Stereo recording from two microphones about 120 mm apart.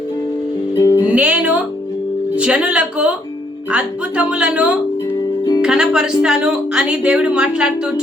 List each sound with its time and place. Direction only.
0.8 s music: 30° left (ahead or behind)
1.0 s music: 15° right (ahead or behind)
2.3 s speech: 10° right (ahead or behind)